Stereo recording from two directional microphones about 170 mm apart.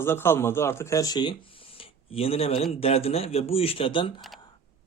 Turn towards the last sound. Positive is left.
turn(degrees=0)  # may be behind; listen again after turning